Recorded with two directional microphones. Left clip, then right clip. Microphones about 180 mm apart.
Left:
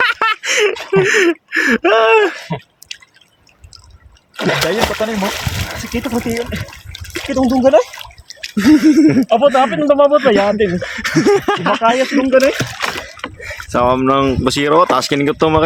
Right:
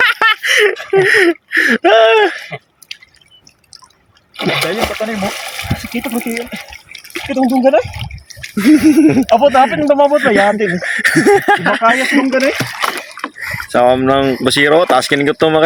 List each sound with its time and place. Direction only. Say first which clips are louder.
0.0 s a sound: right 3 dB; centre (ahead or behind)
0.9 s speech: right 2 dB; 5° left (ahead or behind)
4.4 s speech: even; 25° left (ahead or behind)
8.5 s speech: right 1 dB; centre (ahead or behind)
12.1 s speech: left 1 dB; 15° right (ahead or behind)
13.7 s speech: right 2 dB; centre (ahead or behind)